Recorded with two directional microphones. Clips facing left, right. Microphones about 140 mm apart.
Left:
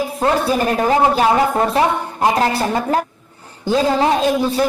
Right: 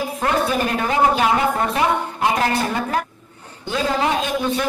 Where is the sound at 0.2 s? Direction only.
35° left (ahead or behind).